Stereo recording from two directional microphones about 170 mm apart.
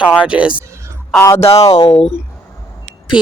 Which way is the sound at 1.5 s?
20° left (ahead or behind).